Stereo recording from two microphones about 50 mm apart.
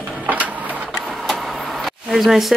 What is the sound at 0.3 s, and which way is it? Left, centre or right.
Printer, right.